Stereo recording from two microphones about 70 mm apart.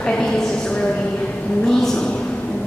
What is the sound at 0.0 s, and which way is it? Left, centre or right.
Speech, centre.